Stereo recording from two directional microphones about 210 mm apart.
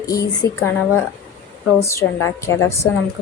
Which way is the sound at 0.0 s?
15° left (ahead or behind).